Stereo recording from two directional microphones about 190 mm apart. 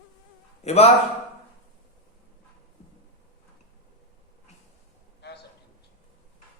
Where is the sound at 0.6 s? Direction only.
35° left (ahead or behind).